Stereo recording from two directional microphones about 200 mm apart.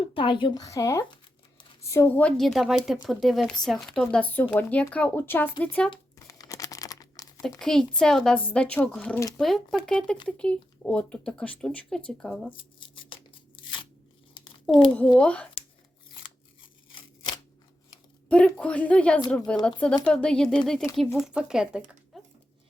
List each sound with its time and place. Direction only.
0.0 s speech: 25° left (ahead or behind); by 5.9 s 10° left (ahead or behind)
5.9 s crumpling: 15° left (ahead or behind)
7.6 s speech: centre (ahead or behind)
12.5 s speech: 25° left (ahead or behind)
13.6 s crunch: 25° left (ahead or behind)
14.9 s speech: 5° left (ahead or behind)
18.3 s speech: 5° left (ahead or behind)